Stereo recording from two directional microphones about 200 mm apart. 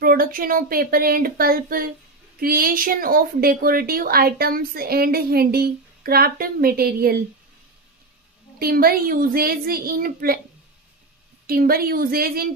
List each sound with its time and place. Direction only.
0.0 s a woman's voice: 45° right (ahead or behind)
8.5 s a woman's voice: 50° right (ahead or behind)
11.4 s a woman's voice: 45° right (ahead or behind)